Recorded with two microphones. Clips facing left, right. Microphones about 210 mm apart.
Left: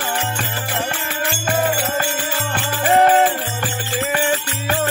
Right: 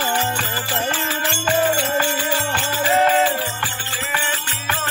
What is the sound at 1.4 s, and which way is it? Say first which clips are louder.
Music: right 1 dB; 55° left (ahead or behind).